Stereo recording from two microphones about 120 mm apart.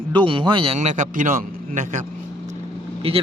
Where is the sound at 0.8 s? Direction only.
90° right.